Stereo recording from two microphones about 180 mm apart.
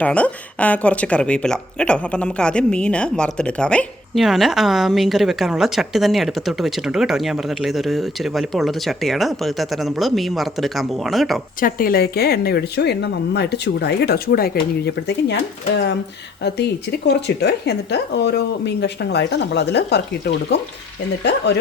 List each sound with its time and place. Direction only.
0.0 s speech: 5° left (ahead or behind)
11.6 s speech: 55° left (ahead or behind)
17.1 s speech: 65° left (ahead or behind)